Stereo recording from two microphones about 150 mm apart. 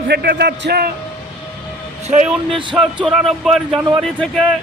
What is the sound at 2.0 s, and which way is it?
Speech, 45° right (ahead or behind).